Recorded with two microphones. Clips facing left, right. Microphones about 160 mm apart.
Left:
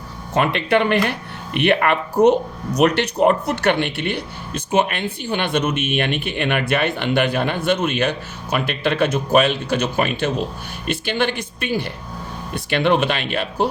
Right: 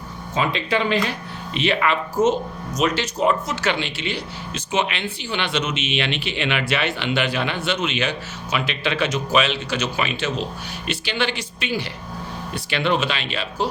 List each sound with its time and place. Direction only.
0.3 s speech: 60° left (ahead or behind)